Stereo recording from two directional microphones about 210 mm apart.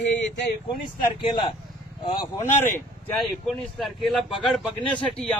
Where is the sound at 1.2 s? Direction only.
25° left (ahead or behind).